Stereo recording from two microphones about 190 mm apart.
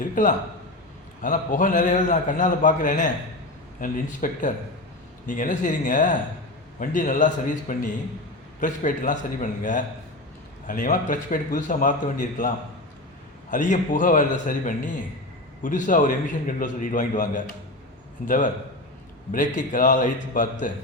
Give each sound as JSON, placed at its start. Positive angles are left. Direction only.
{"t": 0.0, "sound": "a man's voice", "side_deg": 45}
{"t": 13.5, "sound": "a man's voice", "side_deg": 40}
{"t": 19.3, "sound": "a man's voice", "side_deg": 45}